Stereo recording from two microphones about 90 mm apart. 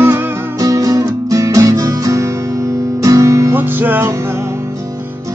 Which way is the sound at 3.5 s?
20° right (ahead or behind).